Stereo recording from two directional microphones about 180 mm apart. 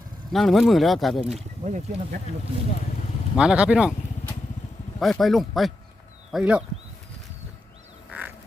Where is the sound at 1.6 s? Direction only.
40° right (ahead or behind).